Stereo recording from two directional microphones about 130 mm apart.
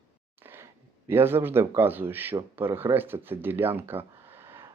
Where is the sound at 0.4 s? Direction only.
20° right (ahead or behind).